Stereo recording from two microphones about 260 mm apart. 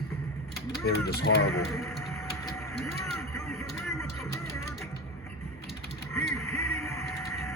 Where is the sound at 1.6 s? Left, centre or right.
Centre.